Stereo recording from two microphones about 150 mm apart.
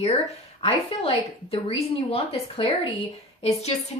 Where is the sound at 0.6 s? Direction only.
40° left (ahead or behind).